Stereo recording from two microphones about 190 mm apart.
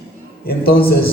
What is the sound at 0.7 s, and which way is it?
Speech, 55° left (ahead or behind).